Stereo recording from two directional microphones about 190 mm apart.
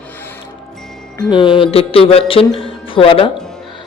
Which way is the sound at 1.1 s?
25° left (ahead or behind).